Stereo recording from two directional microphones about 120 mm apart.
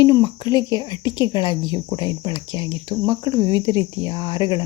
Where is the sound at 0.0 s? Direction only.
35° left (ahead or behind).